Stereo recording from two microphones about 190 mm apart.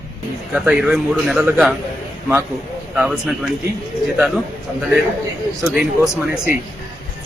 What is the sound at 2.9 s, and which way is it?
A man's voice, 5° right (ahead or behind).